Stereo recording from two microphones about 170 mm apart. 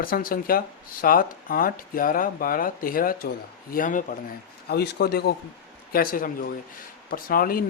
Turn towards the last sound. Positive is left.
turn(degrees=60)  # may be behind; listen again after turning